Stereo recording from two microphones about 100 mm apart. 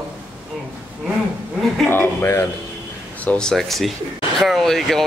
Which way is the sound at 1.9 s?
25° left (ahead or behind).